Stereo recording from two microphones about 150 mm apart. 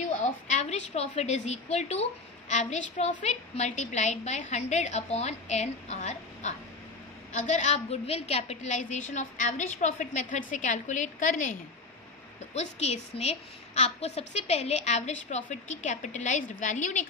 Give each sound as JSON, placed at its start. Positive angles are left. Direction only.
{"t": 0.0, "sound": "a woman's voice", "side_deg": 50}
{"t": 12.5, "sound": "a woman's voice", "side_deg": 45}